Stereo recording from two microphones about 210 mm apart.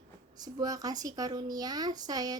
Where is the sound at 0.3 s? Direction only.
20° right (ahead or behind).